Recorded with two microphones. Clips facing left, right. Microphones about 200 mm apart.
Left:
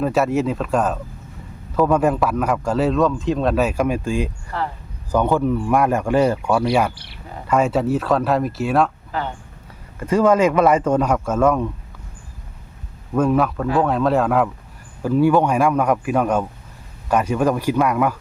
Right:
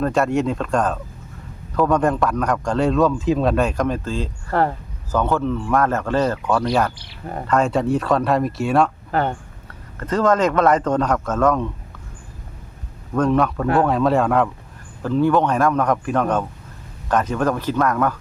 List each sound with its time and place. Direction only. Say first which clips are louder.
0.0 s a man's voice: even; 5° left (ahead or behind)
4.5 s speech: right 7 dB; 55° right (ahead or behind)
5.1 s a man's voice: left 2 dB; 15° left (ahead or behind)
9.1 s speech: right 9 dB; 55° right (ahead or behind)
10.0 s a man's voice: left 2 dB; 10° left (ahead or behind)
13.1 s a man's voice: even; 5° left (ahead or behind)